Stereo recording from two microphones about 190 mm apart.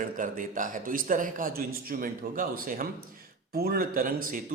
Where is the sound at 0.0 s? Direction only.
45° right (ahead or behind).